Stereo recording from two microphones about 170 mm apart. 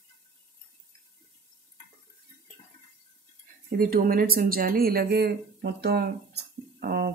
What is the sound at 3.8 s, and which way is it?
Speech, 55° right (ahead or behind).